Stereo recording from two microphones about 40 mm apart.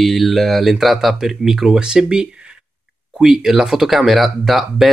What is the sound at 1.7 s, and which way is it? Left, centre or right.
Speech, right.